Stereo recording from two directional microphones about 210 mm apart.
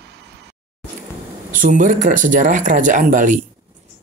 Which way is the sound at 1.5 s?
40° right (ahead or behind).